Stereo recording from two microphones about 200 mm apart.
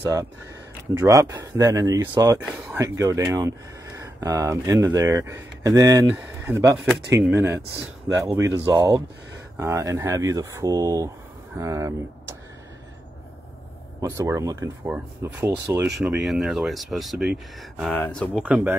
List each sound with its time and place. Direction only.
0.0 s speech: 15° right (ahead or behind)
14.0 s speech: 15° right (ahead or behind)
16.0 s speech: centre (ahead or behind)
18.4 s speech: 5° right (ahead or behind)